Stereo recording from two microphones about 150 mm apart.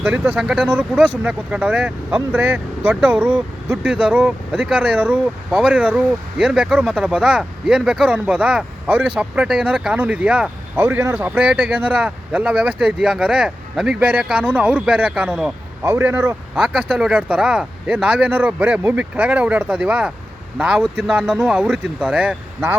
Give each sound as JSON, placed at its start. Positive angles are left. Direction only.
{"t": 0.0, "sound": "speech", "side_deg": -10}
{"t": 15.8, "sound": "speech", "side_deg": -15}
{"t": 16.6, "sound": "speech", "side_deg": -5}